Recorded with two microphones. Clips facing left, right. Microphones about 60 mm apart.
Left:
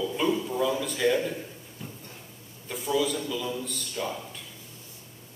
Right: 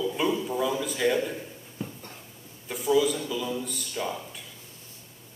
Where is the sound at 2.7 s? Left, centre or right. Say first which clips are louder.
Right 3 dB; centre.